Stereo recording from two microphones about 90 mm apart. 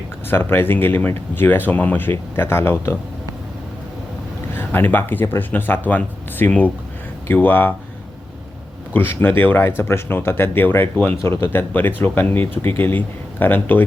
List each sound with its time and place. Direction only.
0.3 s speech: 25° left (ahead or behind)
4.5 s speech: 25° left (ahead or behind)
8.9 s speech: 20° left (ahead or behind)